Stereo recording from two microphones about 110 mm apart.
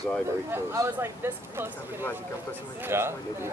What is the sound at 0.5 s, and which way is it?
Speech, 25° right (ahead or behind).